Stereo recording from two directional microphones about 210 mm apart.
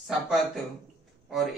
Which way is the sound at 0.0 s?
Centre (ahead or behind).